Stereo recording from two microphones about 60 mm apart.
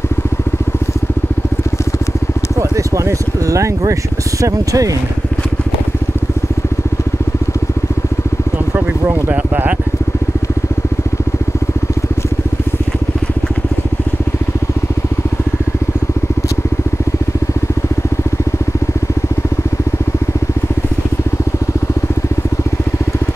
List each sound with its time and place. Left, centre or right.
2.7 s speech: right
8.7 s speech: right